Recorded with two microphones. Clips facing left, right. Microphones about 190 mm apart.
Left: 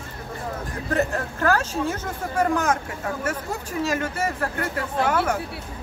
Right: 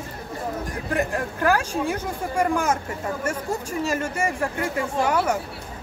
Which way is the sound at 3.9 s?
10° right (ahead or behind).